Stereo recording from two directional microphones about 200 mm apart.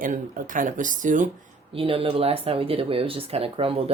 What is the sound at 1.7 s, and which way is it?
Speech, 30° right (ahead or behind).